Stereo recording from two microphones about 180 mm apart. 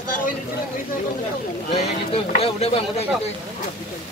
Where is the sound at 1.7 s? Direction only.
35° left (ahead or behind).